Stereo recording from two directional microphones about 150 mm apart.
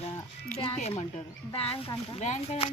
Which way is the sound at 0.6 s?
40° left (ahead or behind).